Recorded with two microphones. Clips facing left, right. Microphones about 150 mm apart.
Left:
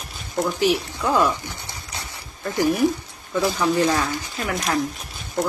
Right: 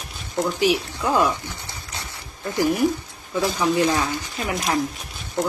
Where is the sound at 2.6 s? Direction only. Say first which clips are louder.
Left 1 dB; 20° left (ahead or behind).